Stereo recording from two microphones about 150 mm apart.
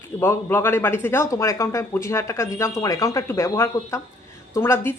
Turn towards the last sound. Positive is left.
turn(degrees=15)  # may be behind; listen again after turning